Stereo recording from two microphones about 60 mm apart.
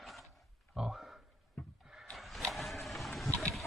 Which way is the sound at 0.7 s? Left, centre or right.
Centre.